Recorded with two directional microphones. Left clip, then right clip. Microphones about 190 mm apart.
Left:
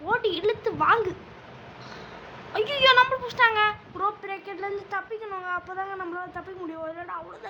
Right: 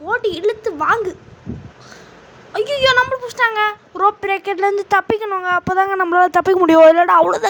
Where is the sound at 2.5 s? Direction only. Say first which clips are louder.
Right 5 dB; 30° right (ahead or behind).